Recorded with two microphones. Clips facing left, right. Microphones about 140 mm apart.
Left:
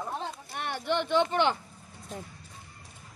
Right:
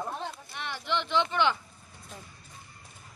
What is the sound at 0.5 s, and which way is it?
Speech, 50° left (ahead or behind).